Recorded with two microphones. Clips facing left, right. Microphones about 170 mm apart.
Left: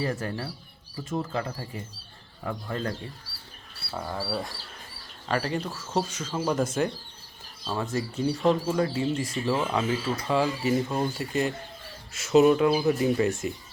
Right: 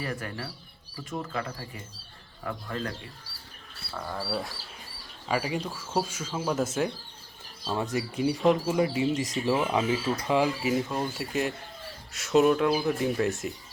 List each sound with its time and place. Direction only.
0.0 s speech: 25° left (ahead or behind)
3.9 s speech: 5° left (ahead or behind)
7.8 s speech: 15° right (ahead or behind); by 13.5 s centre (ahead or behind)